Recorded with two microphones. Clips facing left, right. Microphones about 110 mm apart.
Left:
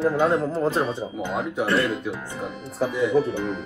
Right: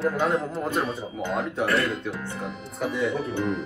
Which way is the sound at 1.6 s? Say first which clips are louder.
Left 2 dB; 25° left (ahead or behind).